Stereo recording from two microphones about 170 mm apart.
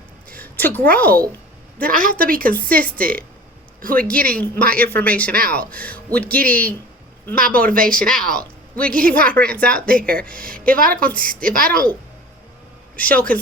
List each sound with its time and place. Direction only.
0.3 s a sound: 10° left (ahead or behind)
0.9 s speech: 10° left (ahead or behind)
2.0 s speech: 55° right (ahead or behind)
2.5 s speech: 10° left (ahead or behind)
3.8 s speech: 55° right (ahead or behind)
4.0 s speech: 5° left (ahead or behind)
7.3 s speech: 55° right (ahead or behind)
8.0 s a woman's voice: 5° left (ahead or behind)
11.5 s speech: 60° right (ahead or behind)
13.0 s speech: 10° left (ahead or behind)